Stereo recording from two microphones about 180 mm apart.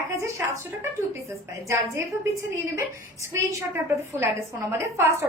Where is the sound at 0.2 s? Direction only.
15° right (ahead or behind).